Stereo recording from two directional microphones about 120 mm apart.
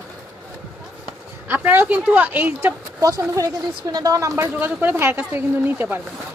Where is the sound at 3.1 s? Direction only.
30° right (ahead or behind).